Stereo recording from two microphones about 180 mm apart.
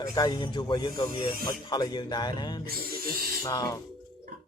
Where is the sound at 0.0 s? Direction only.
20° left (ahead or behind).